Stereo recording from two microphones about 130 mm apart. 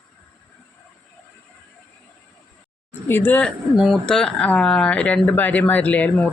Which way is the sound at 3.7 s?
5° right (ahead or behind).